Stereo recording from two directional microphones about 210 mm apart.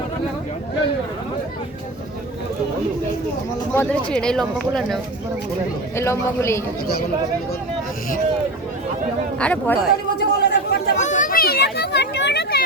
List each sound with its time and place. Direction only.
3.7 s speech: 5° left (ahead or behind)
6.0 s speech: 10° left (ahead or behind)
9.4 s speech: 5° left (ahead or behind)
10.2 s chatter: 50° left (ahead or behind)
10.9 s a sound: 35° left (ahead or behind)